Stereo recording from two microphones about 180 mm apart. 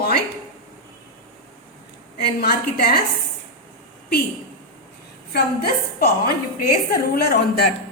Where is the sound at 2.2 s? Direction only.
60° left (ahead or behind).